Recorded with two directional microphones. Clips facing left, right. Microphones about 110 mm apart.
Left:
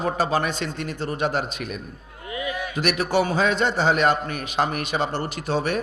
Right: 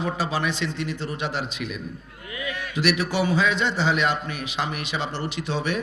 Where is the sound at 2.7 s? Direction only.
45° left (ahead or behind).